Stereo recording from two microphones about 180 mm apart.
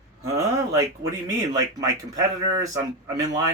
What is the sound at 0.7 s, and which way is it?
Speech, 20° right (ahead or behind).